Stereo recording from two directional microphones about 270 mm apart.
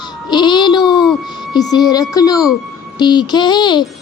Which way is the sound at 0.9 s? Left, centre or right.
Centre.